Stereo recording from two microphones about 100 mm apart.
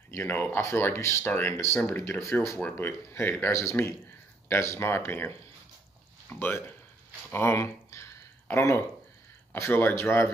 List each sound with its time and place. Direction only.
0.1 s speech: 20° left (ahead or behind)
7.2 s a sound: 25° left (ahead or behind)
9.6 s speech: 20° left (ahead or behind)